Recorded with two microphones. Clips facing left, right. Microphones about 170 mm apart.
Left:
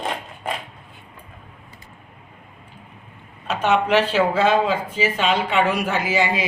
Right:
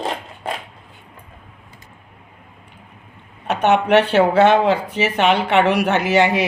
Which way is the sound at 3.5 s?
65° right (ahead or behind).